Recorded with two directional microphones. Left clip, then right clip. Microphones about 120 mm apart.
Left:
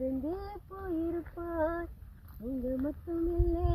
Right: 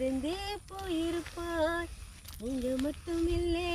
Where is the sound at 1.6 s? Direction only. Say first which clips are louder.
Right 1 dB; 10° right (ahead or behind).